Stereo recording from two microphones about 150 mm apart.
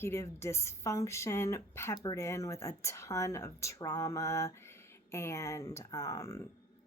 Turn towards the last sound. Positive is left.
turn(degrees=20)  # may be behind; listen again after turning